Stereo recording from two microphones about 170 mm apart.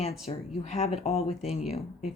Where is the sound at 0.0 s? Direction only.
40° left (ahead or behind).